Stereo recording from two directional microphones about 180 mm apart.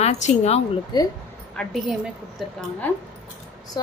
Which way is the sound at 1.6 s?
Centre (ahead or behind).